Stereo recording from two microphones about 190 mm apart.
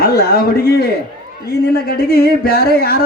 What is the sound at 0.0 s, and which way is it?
A man's voice, 50° left (ahead or behind).